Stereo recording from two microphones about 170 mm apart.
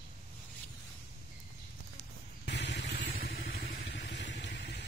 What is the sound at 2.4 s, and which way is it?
Vehicle, 90° left.